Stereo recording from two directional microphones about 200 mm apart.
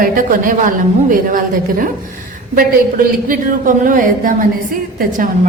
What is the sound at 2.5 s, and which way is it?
A woman's voice, 45° right (ahead or behind).